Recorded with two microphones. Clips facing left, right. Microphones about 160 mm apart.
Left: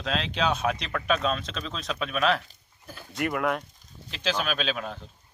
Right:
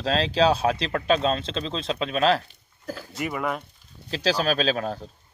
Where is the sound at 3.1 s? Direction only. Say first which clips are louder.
Left 2 dB; centre (ahead or behind).